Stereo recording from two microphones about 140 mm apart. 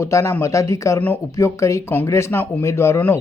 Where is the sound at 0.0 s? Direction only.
20° left (ahead or behind).